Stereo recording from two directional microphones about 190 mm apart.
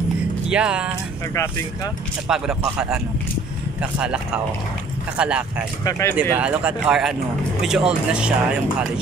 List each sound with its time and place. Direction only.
0.5 s speech: 5° right (ahead or behind)
2.2 s speech: 5° right (ahead or behind)
4.0 s speech: 5° right (ahead or behind)
5.9 s speech: 15° left (ahead or behind)
6.3 s speech: 5° right (ahead or behind)